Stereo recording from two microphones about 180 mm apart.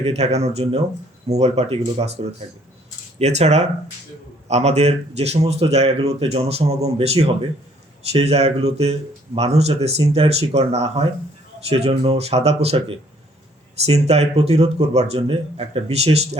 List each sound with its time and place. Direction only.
0.0 s speech: 35° right (ahead or behind)
3.2 s speech: 35° right (ahead or behind)